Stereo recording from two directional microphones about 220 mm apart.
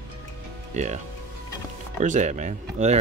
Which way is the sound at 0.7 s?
35° right (ahead or behind).